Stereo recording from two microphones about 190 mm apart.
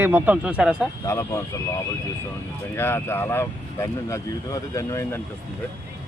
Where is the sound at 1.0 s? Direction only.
15° left (ahead or behind).